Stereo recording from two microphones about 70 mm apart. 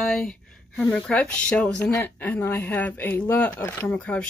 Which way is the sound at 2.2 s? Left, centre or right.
Left.